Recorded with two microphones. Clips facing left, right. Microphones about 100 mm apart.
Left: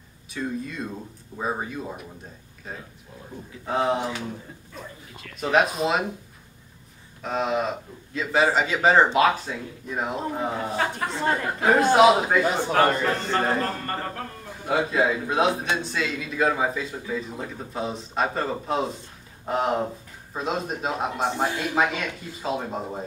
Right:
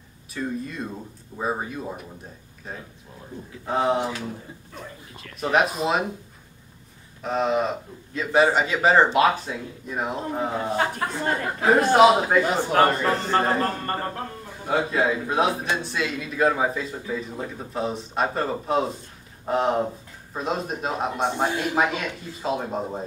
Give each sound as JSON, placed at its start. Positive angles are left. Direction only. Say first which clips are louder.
{"t": 0.3, "sound": "a man's voice", "louder": "right 1 dB", "side_deg": 0}
{"t": 5.4, "sound": "a man's voice", "louder": "even", "side_deg": 0}
{"t": 7.2, "sound": "a man's voice", "louder": "right 2 dB", "side_deg": 0}
{"t": 10.9, "sound": "speech", "louder": "left 1 dB", "side_deg": 25}
{"t": 11.9, "sound": "a man's voice", "louder": "right 1 dB", "side_deg": 0}
{"t": 12.7, "sound": "a man's voice", "louder": "right 2 dB", "side_deg": -30}
{"t": 14.7, "sound": "a man's voice", "louder": "even", "side_deg": 5}